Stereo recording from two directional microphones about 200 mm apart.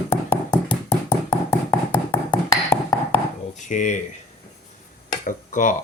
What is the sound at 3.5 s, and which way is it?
Speech, 40° left (ahead or behind).